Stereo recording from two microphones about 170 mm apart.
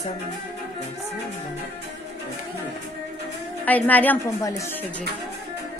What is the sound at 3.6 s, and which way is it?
A woman's voice, 10° left (ahead or behind).